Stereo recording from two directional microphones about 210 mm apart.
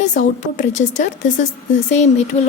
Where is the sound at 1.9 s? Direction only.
35° left (ahead or behind).